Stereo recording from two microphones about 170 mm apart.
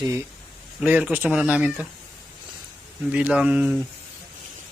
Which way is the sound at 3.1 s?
5° right (ahead or behind).